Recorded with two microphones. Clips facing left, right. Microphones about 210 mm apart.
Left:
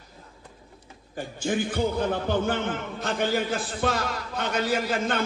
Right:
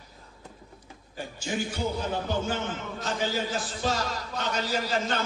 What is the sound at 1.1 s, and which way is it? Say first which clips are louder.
A man's voice: left 5 dB; 55° left (ahead or behind).